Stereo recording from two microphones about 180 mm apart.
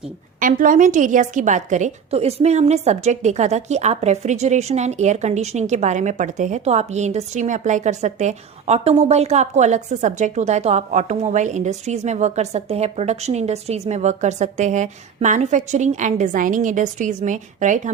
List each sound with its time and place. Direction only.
0.3 s a woman's voice: 45° right (ahead or behind)